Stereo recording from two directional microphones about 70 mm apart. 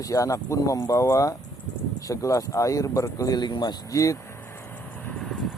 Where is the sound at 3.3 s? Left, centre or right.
Left.